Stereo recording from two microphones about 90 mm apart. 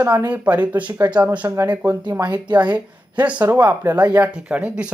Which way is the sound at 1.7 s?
20° right (ahead or behind).